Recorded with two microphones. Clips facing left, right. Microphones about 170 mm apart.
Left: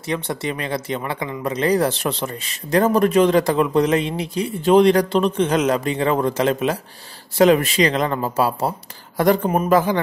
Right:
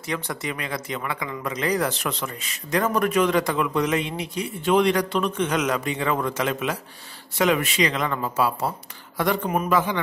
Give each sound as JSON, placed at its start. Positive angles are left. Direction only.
{"t": 0.1, "sound": "speech", "side_deg": 30}